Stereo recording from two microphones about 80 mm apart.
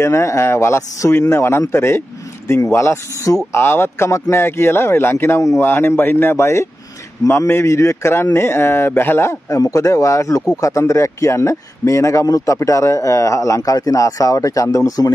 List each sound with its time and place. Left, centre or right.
0.0 s a man's voice: left
9.6 s speech: left